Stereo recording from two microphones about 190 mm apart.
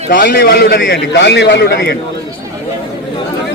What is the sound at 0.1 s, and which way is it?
A man's voice, 50° left (ahead or behind).